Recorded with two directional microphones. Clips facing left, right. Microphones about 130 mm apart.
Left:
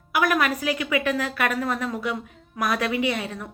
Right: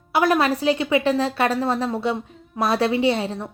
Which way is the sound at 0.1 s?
30° right (ahead or behind).